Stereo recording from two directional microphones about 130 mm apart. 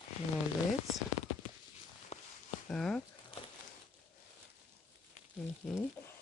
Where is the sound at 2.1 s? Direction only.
55° left (ahead or behind).